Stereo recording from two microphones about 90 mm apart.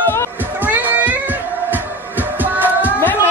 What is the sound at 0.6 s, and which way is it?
Cat, 20° right (ahead or behind).